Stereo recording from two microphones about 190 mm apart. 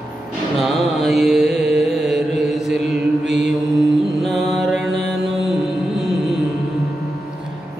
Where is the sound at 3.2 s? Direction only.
70° right (ahead or behind).